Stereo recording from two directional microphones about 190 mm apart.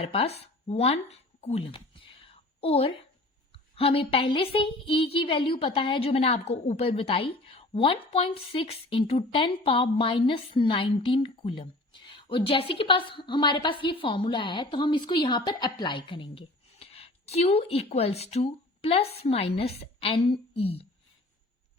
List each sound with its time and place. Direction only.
0.0 s speech: 30° left (ahead or behind)